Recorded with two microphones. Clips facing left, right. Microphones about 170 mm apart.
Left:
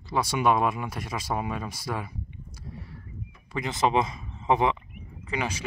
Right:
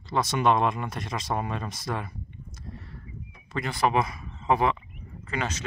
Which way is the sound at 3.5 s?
20° left (ahead or behind).